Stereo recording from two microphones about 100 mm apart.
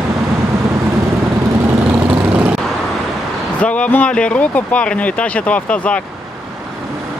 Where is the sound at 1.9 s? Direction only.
15° right (ahead or behind).